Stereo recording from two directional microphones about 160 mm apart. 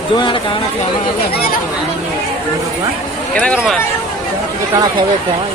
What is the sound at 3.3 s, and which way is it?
Speech, 5° left (ahead or behind).